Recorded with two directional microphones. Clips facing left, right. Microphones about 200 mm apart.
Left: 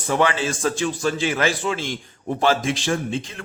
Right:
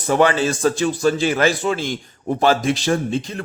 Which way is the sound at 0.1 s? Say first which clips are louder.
Right 4 dB; 40° right (ahead or behind).